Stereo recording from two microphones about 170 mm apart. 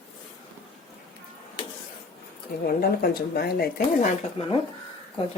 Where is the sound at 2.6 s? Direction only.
65° left (ahead or behind).